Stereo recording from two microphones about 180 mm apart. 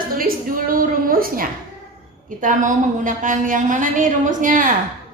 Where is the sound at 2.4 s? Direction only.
45° right (ahead or behind).